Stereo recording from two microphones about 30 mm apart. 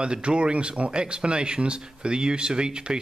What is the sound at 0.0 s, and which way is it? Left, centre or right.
Speech, right.